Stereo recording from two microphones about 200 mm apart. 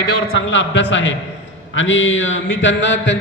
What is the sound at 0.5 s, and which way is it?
A man's voice, 65° left (ahead or behind).